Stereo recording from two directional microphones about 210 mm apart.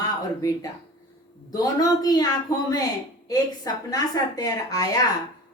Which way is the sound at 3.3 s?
20° left (ahead or behind).